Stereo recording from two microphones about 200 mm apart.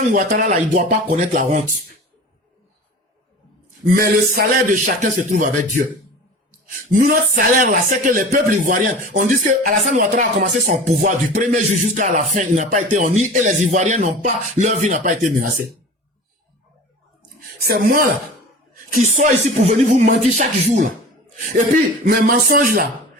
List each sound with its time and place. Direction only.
0.1 s speech: 45° right (ahead or behind)
3.9 s speech: 45° right (ahead or behind)
6.9 s speech: 45° right (ahead or behind)
17.6 s speech: 45° right (ahead or behind)
22.0 s speech: 45° right (ahead or behind)